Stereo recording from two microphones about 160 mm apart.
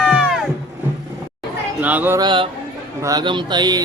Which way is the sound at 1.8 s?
10° right (ahead or behind).